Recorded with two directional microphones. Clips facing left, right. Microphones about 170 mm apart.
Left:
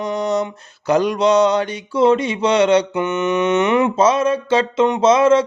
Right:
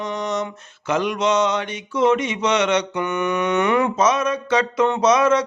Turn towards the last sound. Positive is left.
turn(degrees=25)  # may be behind; listen again after turning